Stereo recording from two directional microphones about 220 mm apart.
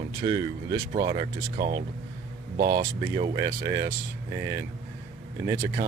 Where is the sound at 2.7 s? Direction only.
20° right (ahead or behind).